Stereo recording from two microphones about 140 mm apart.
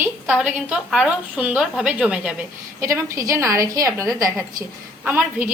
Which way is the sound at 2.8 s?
20° right (ahead or behind).